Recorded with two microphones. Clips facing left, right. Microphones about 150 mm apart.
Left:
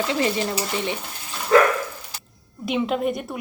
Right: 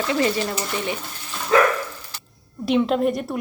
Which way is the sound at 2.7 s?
5° left (ahead or behind).